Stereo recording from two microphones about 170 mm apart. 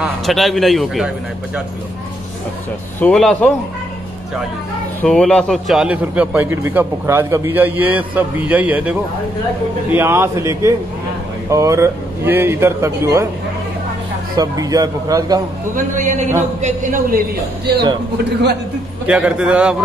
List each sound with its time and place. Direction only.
0.0 s a man's voice: centre (ahead or behind)
3.0 s a man's voice: 5° left (ahead or behind)
5.0 s a man's voice: 5° left (ahead or behind)
9.9 s a man's voice: 15° right (ahead or behind)
14.3 s a man's voice: 20° right (ahead or behind)
15.7 s a man's voice: 45° right (ahead or behind)
18.1 s a man's voice: 75° right (ahead or behind)
19.0 s a man's voice: 5° right (ahead or behind)